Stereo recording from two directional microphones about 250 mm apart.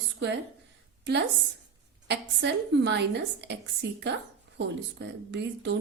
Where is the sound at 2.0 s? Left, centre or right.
Right.